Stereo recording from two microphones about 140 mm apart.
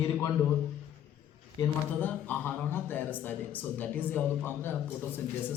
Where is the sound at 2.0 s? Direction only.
15° left (ahead or behind).